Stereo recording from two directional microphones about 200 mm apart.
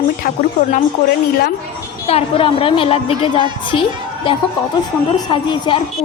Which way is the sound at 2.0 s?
30° left (ahead or behind).